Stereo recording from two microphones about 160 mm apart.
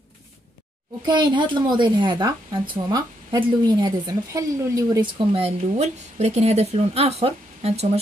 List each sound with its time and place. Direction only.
1.0 s a woman's voice: 30° right (ahead or behind)